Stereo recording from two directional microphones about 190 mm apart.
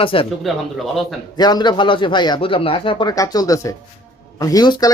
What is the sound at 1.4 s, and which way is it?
Speech, 20° left (ahead or behind).